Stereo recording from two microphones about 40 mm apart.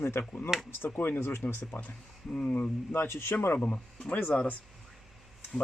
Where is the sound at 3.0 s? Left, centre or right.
Left.